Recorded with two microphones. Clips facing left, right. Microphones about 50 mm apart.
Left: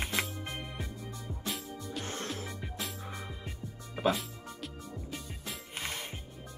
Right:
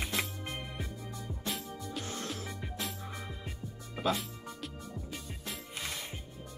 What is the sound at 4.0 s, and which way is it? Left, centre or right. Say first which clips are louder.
Music: left 3 dB; centre.